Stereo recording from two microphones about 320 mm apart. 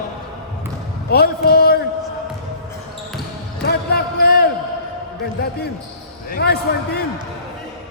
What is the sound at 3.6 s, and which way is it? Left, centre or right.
Basketball bounce, left.